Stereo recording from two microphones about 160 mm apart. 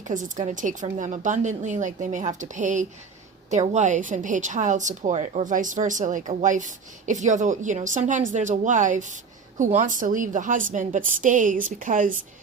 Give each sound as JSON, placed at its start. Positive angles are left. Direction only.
{"t": 0.0, "sound": "a woman's voice", "side_deg": -50}